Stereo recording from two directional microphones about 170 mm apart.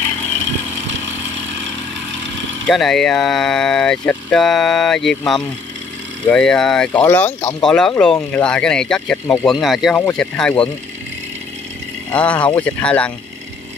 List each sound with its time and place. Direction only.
2.7 s speech: centre (ahead or behind)
12.1 s speech: 10° left (ahead or behind)